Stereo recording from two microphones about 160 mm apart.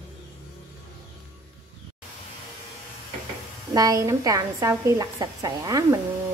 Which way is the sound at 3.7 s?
20° right (ahead or behind).